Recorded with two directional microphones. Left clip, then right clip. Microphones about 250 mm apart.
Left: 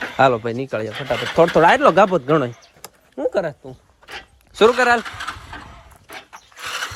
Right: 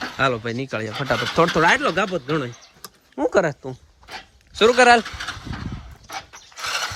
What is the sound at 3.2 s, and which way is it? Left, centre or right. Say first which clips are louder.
Speech: right 2 dB; centre.